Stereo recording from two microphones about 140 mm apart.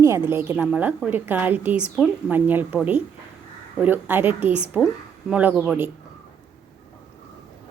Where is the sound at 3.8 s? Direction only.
15° right (ahead or behind).